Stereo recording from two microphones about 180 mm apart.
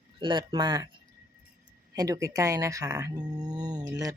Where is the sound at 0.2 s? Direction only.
25° right (ahead or behind).